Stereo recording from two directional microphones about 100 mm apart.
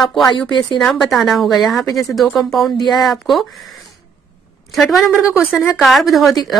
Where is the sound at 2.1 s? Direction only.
Centre (ahead or behind).